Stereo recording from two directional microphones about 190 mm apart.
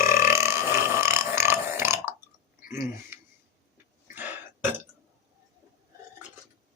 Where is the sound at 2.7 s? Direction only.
15° right (ahead or behind).